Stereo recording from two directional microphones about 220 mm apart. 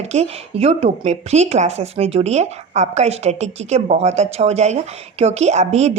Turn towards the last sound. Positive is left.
turn(degrees=-30)  # may be behind; listen again after turning